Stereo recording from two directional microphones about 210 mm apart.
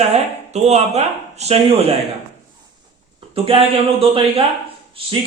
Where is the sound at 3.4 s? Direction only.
25° right (ahead or behind).